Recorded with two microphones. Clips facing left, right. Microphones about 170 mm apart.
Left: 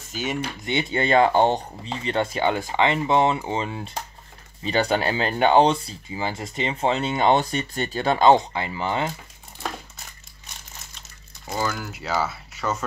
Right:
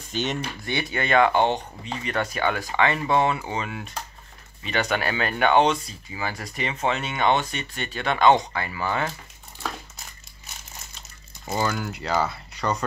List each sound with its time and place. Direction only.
0.1 s speech: 5° left (ahead or behind)
0.7 s speech: 25° left (ahead or behind)
11.4 s speech: centre (ahead or behind)